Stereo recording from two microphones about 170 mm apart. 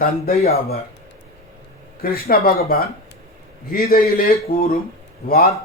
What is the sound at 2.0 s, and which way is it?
Speech, 60° left (ahead or behind).